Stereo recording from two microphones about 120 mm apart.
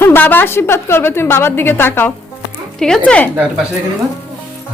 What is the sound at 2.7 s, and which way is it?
Speech, 5° left (ahead or behind).